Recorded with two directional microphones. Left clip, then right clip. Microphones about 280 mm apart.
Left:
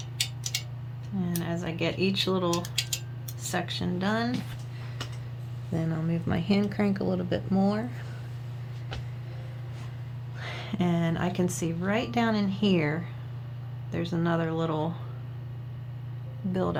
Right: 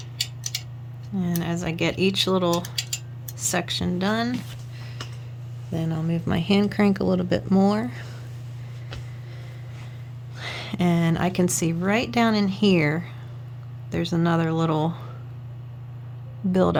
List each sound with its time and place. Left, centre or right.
1.4 s speech: right
5.7 s speech: centre
10.4 s speech: right
16.5 s speech: right